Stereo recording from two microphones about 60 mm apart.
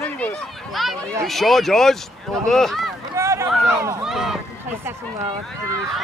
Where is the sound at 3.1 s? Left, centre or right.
Right.